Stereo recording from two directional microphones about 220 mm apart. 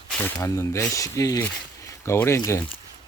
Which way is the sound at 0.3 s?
15° left (ahead or behind).